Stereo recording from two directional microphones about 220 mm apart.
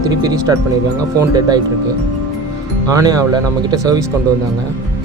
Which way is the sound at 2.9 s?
15° right (ahead or behind).